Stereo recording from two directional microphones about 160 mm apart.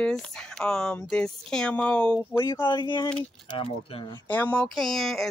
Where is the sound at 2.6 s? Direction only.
30° left (ahead or behind).